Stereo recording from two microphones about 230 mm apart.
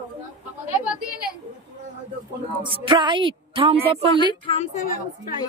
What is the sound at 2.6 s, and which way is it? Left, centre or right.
A woman's voice, right.